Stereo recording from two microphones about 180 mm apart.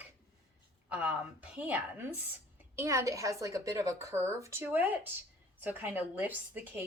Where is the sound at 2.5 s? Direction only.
15° right (ahead or behind).